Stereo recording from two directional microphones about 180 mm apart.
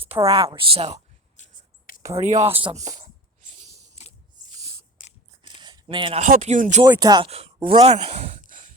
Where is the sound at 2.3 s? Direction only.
40° right (ahead or behind).